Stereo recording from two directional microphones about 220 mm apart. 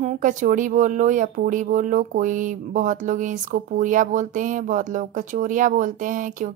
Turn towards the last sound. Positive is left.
turn(degrees=-35)  # may be behind; listen again after turning